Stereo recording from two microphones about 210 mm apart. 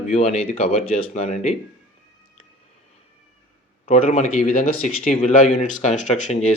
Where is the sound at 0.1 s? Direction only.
30° left (ahead or behind).